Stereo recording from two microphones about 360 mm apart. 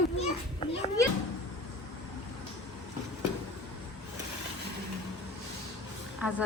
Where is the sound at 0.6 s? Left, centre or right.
Centre.